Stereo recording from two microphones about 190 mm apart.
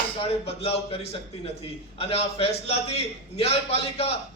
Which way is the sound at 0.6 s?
30° left (ahead or behind).